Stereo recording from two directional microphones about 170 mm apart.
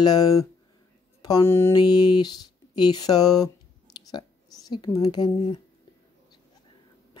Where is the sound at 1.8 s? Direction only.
25° left (ahead or behind).